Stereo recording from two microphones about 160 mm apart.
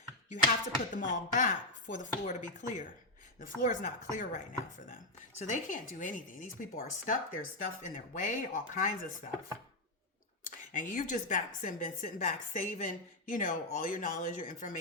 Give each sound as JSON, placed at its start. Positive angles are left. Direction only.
{"t": 0.3, "sound": "speech", "side_deg": 55}
{"t": 10.4, "sound": "speech", "side_deg": 55}